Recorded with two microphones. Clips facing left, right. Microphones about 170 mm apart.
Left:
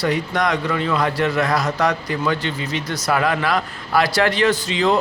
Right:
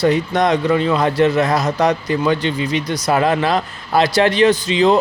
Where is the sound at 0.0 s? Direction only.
25° right (ahead or behind).